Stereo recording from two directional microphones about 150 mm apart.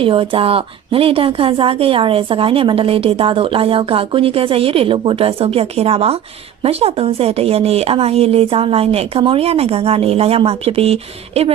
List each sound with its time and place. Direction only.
0.0 s speech: 35° right (ahead or behind)